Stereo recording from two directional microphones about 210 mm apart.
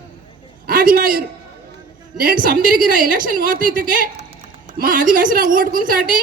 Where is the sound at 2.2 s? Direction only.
45° right (ahead or behind).